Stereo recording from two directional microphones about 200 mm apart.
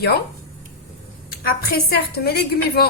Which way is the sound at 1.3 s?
50° left (ahead or behind).